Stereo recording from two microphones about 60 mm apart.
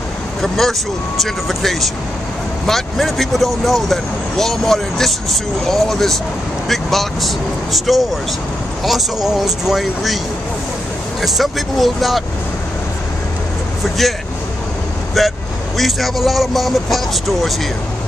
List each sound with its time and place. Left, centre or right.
0.4 s speech: centre
11.1 s speech: centre
15.2 s speech: centre